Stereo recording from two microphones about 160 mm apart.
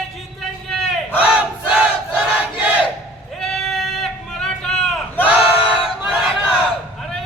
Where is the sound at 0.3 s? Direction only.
Centre (ahead or behind).